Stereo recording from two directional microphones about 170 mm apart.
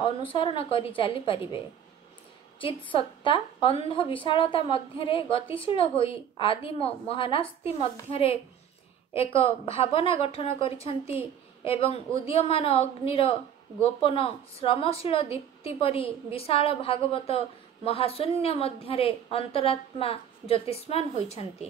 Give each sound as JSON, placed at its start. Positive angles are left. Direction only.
{"t": 0.0, "sound": "a woman's voice", "side_deg": 30}
{"t": 2.6, "sound": "a woman's voice", "side_deg": 30}